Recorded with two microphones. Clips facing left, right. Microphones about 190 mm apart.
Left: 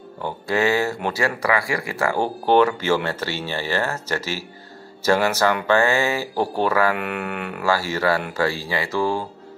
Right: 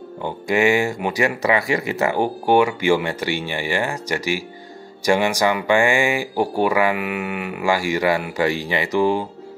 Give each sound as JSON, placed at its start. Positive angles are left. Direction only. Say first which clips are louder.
{"t": 0.2, "sound": "speech", "louder": "right 3 dB", "side_deg": -15}
{"t": 7.6, "sound": "speech", "louder": "right 2 dB", "side_deg": -15}